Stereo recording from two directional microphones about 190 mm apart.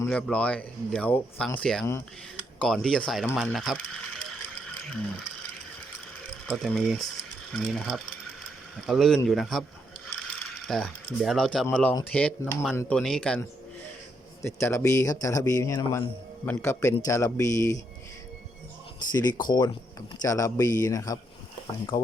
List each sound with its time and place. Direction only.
0.0 s speech: 5° left (ahead or behind)
6.5 s speech: centre (ahead or behind)
10.7 s speech: centre (ahead or behind)
14.4 s speech: 15° left (ahead or behind)
19.1 s speech: 20° left (ahead or behind)